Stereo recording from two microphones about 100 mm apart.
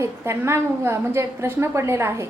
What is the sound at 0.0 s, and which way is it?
A woman's voice, 25° right (ahead or behind).